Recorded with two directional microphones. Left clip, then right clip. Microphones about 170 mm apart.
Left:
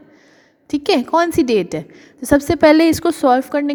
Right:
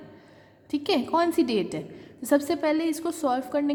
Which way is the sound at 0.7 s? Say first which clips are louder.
Left 9 dB; 40° left (ahead or behind).